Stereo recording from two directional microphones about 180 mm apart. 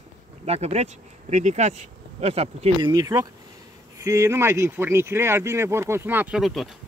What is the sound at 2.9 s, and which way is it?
Speech, 20° right (ahead or behind).